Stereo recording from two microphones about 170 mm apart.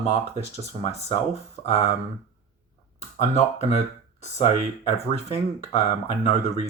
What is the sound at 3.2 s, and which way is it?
Speech, 40° left (ahead or behind).